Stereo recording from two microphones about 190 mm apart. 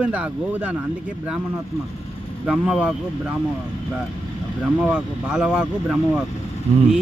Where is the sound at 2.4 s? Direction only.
5° right (ahead or behind).